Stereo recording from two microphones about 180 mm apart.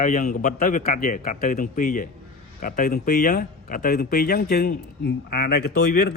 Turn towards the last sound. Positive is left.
turn(degrees=65)  # may be behind; listen again after turning